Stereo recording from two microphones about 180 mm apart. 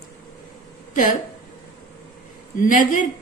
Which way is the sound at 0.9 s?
45° left (ahead or behind).